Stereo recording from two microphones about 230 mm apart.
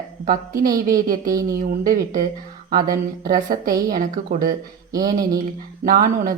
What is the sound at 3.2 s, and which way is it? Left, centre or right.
Speech, right.